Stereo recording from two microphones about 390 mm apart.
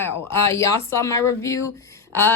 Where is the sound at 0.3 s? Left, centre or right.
Centre.